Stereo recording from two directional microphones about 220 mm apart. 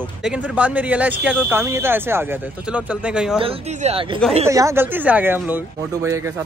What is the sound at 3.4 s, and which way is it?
Speech, 30° right (ahead or behind).